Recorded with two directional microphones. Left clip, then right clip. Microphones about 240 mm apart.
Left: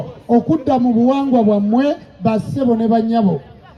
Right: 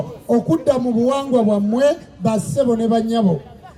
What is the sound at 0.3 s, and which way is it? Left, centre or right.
A man's voice, right.